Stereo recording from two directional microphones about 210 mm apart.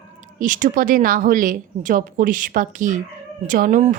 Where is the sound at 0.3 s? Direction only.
40° right (ahead or behind).